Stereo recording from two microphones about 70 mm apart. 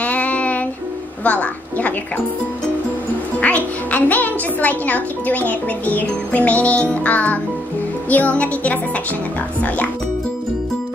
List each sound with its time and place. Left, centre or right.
0.0 s music: left
1.2 s a woman's voice: left
3.3 s a woman's voice: left